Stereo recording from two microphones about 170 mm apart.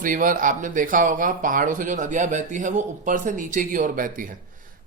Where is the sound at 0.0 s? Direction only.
55° right (ahead or behind).